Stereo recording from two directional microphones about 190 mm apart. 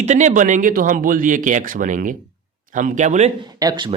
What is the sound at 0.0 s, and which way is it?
Speech, 40° right (ahead or behind).